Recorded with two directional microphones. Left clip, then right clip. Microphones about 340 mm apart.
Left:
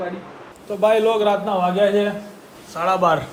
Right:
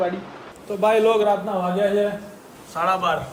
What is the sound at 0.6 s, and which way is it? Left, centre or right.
A man's voice, centre.